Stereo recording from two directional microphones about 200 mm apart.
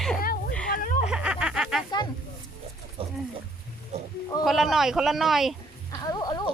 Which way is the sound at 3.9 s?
35° right (ahead or behind).